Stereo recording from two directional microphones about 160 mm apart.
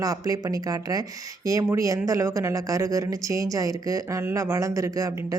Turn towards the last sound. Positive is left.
turn(degrees=-20)  # may be behind; listen again after turning